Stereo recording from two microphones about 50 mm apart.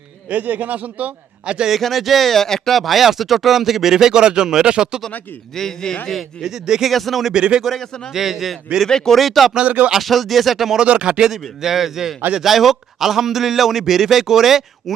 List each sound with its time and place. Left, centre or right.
0.3 s a man's voice: right
1.5 s a man's voice: centre
1.7 s speech: centre
5.5 s a man's voice: centre
6.1 s speech: centre
7.3 s a man's voice: centre
7.6 s speech: centre
8.1 s a man's voice: centre
8.9 s a man's voice: centre
9.1 s speech: centre
9.6 s speech: right
9.9 s speech: centre
10.8 s speech: centre
11.3 s a man's voice: centre